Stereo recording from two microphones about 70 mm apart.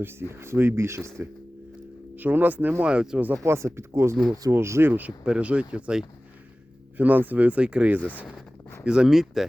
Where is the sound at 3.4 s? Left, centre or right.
Right.